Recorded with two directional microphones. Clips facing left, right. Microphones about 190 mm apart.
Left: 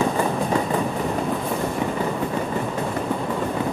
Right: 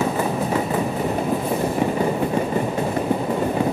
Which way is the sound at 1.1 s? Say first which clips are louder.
Right 2 dB; 20° right (ahead or behind).